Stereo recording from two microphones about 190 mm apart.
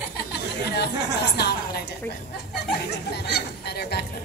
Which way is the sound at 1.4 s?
60° left (ahead or behind).